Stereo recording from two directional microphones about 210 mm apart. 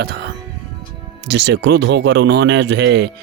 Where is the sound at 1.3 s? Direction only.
55° right (ahead or behind).